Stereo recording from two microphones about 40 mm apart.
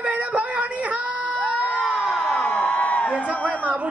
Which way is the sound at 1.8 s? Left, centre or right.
Right.